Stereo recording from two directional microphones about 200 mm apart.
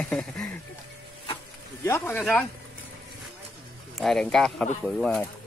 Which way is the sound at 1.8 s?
10° left (ahead or behind).